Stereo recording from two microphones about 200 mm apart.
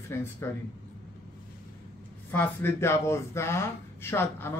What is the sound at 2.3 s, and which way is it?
Speech, 10° left (ahead or behind).